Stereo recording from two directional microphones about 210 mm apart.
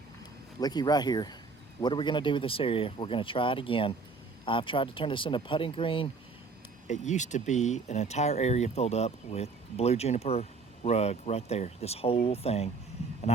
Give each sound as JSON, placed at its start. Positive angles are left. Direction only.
{"t": 0.6, "sound": "speech", "side_deg": 20}